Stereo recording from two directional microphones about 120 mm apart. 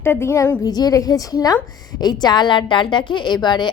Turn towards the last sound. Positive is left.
turn(degrees=40)  # may be behind; listen again after turning